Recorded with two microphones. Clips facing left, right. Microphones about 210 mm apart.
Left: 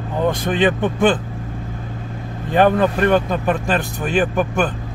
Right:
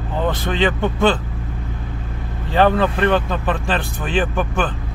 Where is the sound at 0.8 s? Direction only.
15° left (ahead or behind).